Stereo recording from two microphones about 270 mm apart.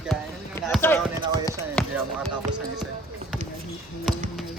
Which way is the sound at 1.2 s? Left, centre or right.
Centre.